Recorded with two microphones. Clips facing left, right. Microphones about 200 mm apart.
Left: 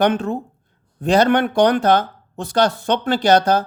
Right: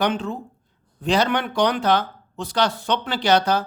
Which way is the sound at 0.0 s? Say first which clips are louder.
Left 5 dB; 50° left (ahead or behind).